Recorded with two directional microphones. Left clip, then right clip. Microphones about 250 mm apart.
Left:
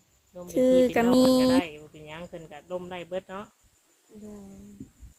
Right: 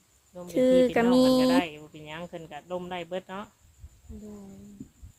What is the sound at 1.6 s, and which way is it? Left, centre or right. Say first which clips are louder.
Speech: even; right.